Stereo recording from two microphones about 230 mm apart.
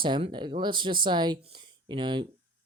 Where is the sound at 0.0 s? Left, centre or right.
Right.